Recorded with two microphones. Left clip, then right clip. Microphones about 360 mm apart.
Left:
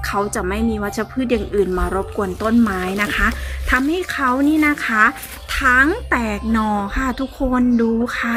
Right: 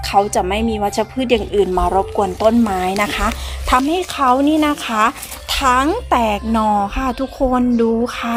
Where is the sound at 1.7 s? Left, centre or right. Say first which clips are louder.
Right 6 dB; right.